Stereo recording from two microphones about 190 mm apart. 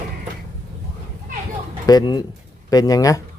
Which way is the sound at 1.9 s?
20° left (ahead or behind).